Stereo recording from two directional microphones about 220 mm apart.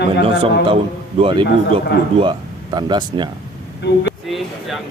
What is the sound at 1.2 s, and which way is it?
Speech, 20° right (ahead or behind).